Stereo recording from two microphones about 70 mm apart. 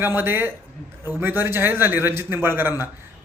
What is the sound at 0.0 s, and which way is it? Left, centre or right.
A man's voice, right.